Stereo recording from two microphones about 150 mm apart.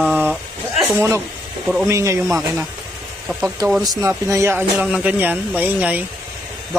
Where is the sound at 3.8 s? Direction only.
20° right (ahead or behind).